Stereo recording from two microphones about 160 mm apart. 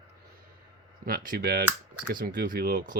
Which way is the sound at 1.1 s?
65° right (ahead or behind).